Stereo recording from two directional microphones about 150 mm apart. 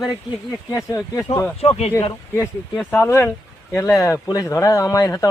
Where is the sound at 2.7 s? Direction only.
10° left (ahead or behind).